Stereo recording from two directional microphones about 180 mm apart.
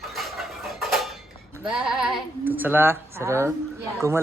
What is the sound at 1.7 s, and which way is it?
Speech, 5° right (ahead or behind).